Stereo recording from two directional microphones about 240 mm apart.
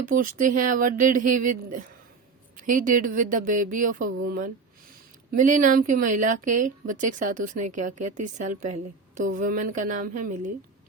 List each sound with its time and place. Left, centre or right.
0.0 s a woman's voice: right
2.6 s a woman's voice: right